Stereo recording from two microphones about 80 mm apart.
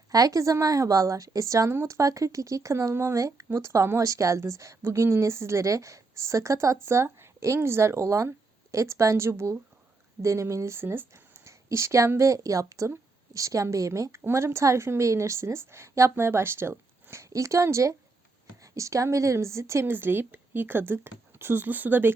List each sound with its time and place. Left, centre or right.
0.1 s a woman's voice: right